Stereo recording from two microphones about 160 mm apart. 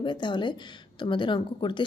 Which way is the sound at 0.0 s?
30° left (ahead or behind).